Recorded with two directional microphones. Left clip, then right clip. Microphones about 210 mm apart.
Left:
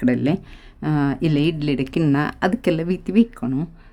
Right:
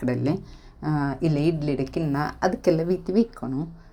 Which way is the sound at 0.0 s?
40° left (ahead or behind).